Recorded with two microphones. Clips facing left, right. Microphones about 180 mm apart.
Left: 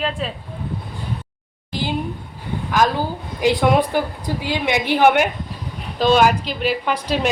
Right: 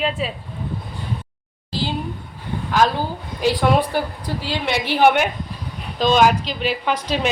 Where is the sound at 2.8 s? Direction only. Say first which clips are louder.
Even; 15° left (ahead or behind).